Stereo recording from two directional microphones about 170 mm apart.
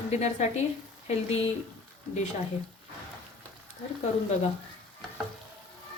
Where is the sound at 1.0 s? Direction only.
40° left (ahead or behind).